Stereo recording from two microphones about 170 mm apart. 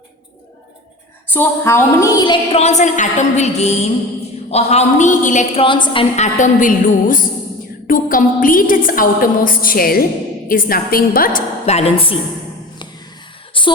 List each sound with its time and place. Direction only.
1.3 s a woman's voice: 15° left (ahead or behind); by 5.6 s 45° left (ahead or behind)
5.6 s a woman's voice: 30° left (ahead or behind); by 7.3 s 50° left (ahead or behind)
7.9 s a sound: 55° left (ahead or behind)
11.6 s a woman's voice: 40° left (ahead or behind)